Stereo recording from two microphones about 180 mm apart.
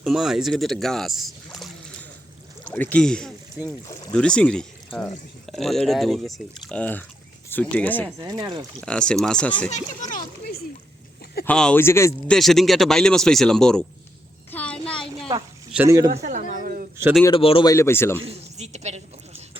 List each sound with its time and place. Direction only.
0.0 s speech: centre (ahead or behind)
8.2 s speech: 20° right (ahead or behind)
8.8 s speech: 5° left (ahead or behind)
9.6 s a child's voice: 40° left (ahead or behind)
11.4 s speech: 5° left (ahead or behind)
12.3 s speech: centre (ahead or behind)
14.5 s a sound: 5° left (ahead or behind)
15.7 s speech: 15° right (ahead or behind)
16.1 s a sound: 45° right (ahead or behind)
17.0 s speech: 5° right (ahead or behind)
17.3 s speech: 30° left (ahead or behind); by 18.2 s 15° left (ahead or behind)
18.2 s a sound: 35° right (ahead or behind)